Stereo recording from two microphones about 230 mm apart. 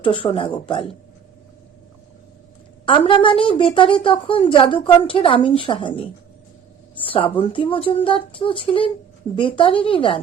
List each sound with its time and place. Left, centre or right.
0.0 s a woman's voice: left
2.8 s a woman's voice: left